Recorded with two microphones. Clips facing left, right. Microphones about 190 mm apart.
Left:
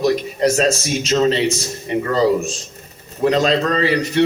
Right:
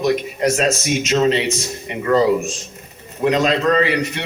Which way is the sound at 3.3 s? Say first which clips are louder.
Even; 35° left (ahead or behind).